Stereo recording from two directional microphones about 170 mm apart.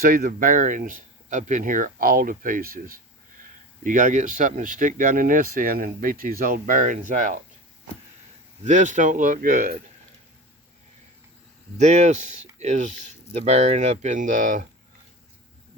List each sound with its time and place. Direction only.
0.0 s speech: 60° right (ahead or behind)
8.6 s speech: 45° right (ahead or behind)
11.8 s speech: 45° right (ahead or behind)